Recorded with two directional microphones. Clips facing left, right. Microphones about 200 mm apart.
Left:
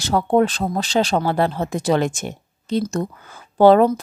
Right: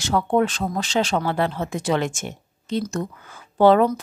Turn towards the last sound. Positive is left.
turn(degrees=35)  # may be behind; listen again after turning